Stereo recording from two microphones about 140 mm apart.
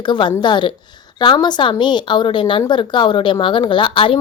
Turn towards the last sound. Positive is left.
turn(degrees=40)  # may be behind; listen again after turning